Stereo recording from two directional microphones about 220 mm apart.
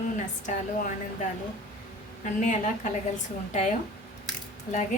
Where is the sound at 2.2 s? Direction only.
35° left (ahead or behind).